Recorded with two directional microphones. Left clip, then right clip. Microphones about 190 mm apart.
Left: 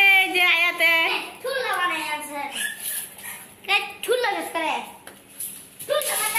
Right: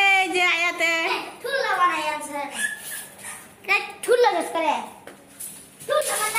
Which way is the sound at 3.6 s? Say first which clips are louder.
Even; 40° right (ahead or behind).